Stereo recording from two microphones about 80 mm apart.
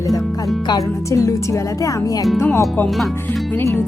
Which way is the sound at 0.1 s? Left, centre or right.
Centre.